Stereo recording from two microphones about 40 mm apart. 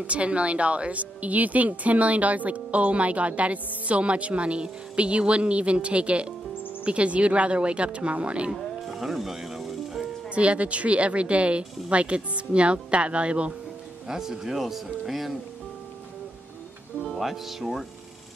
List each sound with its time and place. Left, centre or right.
0.0 s a woman's voice: right
8.6 s music: centre
10.3 s speech: right
14.0 s speech: centre
17.2 s speech: centre